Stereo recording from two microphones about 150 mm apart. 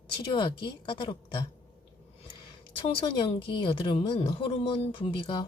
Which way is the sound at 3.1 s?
35° left (ahead or behind).